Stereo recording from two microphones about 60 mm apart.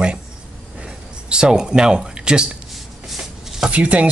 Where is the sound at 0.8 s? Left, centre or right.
Centre.